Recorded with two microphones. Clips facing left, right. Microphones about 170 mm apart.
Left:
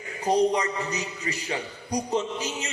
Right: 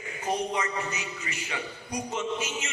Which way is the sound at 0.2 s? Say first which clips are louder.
Left 7 dB; 35° left (ahead or behind).